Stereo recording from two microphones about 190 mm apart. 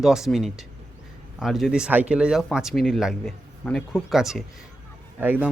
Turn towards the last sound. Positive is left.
turn(degrees=-10)  # may be behind; listen again after turning